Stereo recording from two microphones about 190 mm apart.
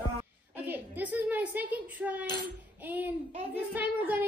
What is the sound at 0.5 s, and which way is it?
A woman's voice, 10° right (ahead or behind).